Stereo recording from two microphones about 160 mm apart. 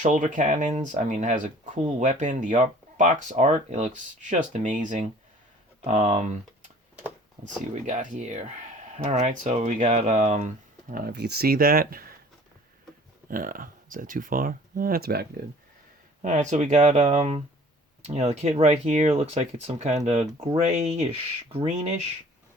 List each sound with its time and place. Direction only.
0.0 s speech: 50° right (ahead or behind)
7.9 s speech: 50° right (ahead or behind); by 12.1 s 65° right (ahead or behind)
13.3 s speech: 60° right (ahead or behind); by 15.3 s 80° right
16.2 s speech: 50° right (ahead or behind)